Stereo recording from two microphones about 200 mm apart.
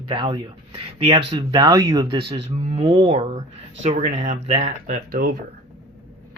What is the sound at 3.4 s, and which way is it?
Speech, 35° right (ahead or behind).